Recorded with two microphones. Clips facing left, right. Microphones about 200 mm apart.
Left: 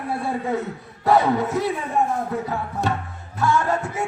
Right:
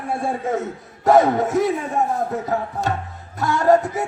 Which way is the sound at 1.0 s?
45° right (ahead or behind).